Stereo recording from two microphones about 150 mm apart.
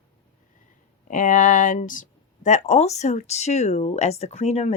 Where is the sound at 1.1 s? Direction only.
60° left (ahead or behind).